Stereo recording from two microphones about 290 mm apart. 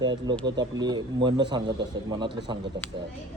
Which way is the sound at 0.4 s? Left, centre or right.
Centre.